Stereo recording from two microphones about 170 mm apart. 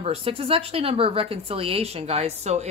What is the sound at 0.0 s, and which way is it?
Speech, 35° right (ahead or behind).